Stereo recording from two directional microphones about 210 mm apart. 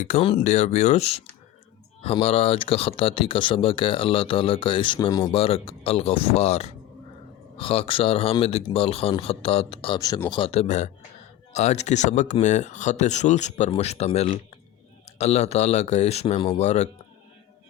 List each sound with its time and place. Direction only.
0.0 s speech: 30° left (ahead or behind)